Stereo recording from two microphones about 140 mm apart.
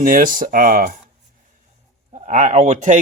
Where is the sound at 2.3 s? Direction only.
55° right (ahead or behind).